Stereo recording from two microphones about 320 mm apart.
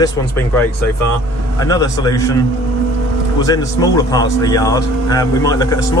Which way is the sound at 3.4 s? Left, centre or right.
Centre.